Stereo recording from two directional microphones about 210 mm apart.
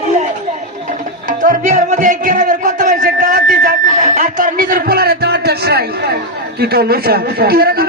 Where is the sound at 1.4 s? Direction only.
40° right (ahead or behind).